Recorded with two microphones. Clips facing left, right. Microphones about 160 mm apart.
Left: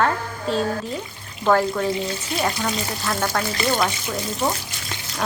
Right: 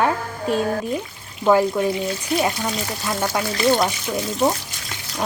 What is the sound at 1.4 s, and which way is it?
A woman's voice, 10° right (ahead or behind).